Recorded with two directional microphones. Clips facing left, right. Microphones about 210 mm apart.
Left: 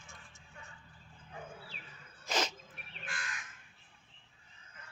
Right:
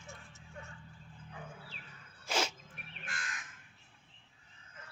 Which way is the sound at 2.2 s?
10° right (ahead or behind).